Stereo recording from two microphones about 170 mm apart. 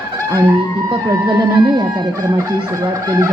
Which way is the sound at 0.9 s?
25° right (ahead or behind).